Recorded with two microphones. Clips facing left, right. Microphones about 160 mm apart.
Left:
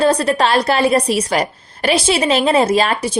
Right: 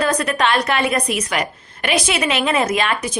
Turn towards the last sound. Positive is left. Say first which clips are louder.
# left 5 dB
turn(degrees=30)  # may be behind; listen again after turning